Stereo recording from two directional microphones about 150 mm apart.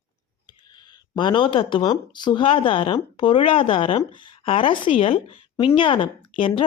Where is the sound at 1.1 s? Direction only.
30° left (ahead or behind).